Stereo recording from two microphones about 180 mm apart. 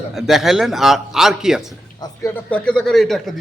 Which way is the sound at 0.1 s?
Centre (ahead or behind).